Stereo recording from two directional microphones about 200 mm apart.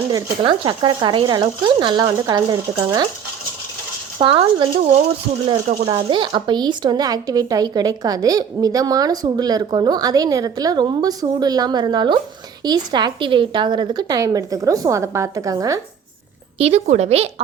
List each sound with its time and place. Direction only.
0.1 s speech: 20° right (ahead or behind)
4.2 s speech: 25° right (ahead or behind)
5.6 s a woman's voice: 35° right (ahead or behind)
5.9 s speech: 25° right (ahead or behind)
16.6 s a woman's voice: 30° right (ahead or behind)